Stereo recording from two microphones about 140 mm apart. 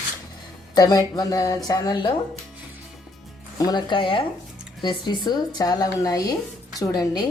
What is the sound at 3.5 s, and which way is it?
Speech, 30° left (ahead or behind).